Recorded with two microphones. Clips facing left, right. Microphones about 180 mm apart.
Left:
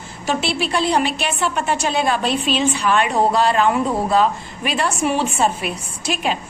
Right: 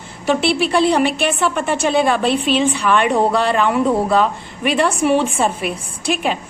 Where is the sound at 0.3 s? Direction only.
60° right (ahead or behind).